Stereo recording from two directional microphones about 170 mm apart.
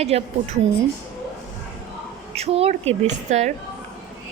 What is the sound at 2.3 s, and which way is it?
A woman's voice, 35° right (ahead or behind).